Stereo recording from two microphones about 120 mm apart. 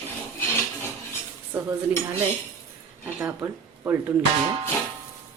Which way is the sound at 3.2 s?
20° right (ahead or behind).